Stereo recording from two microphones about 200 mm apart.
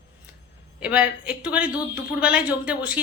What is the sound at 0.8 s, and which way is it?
A woman's voice, 5° right (ahead or behind).